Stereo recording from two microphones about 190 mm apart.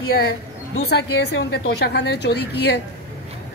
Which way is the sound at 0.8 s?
60° left (ahead or behind).